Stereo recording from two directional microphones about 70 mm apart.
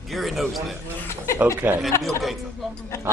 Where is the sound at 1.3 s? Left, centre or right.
Right.